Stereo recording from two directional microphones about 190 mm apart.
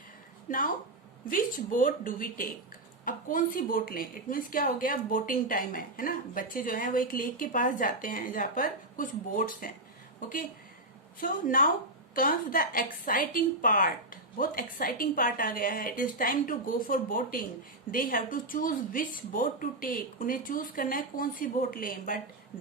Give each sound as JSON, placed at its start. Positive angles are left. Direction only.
{"t": 0.5, "sound": "a woman's voice", "side_deg": 45}